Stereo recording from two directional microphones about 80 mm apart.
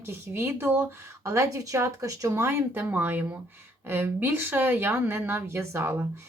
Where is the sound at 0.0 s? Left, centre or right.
Right.